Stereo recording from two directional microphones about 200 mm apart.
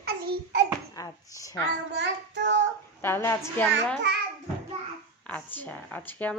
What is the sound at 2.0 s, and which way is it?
Child singing, 65° right (ahead or behind).